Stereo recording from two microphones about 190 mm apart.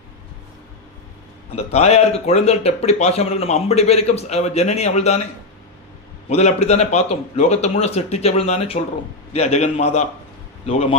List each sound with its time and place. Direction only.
1.5 s speech: 35° left (ahead or behind)
6.2 s speech: 35° left (ahead or behind)